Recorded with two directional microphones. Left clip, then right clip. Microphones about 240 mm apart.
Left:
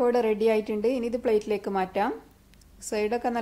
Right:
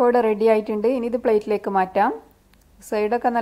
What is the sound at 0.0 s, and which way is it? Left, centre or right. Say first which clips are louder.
A woman's voice: right 6 dB; centre.